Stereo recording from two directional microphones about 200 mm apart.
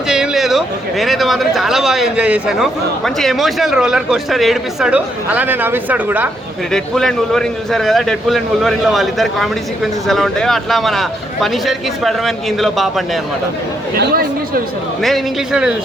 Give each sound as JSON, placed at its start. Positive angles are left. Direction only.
{"t": 0.1, "sound": "a man's voice", "side_deg": 0}
{"t": 6.7, "sound": "a man's voice", "side_deg": 0}
{"t": 13.9, "sound": "speech", "side_deg": -50}
{"t": 15.0, "sound": "a man's voice", "side_deg": 0}